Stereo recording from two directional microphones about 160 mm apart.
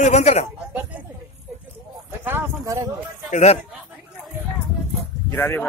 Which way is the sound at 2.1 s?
15° right (ahead or behind).